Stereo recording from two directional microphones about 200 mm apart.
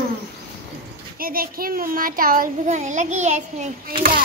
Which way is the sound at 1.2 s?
45° right (ahead or behind).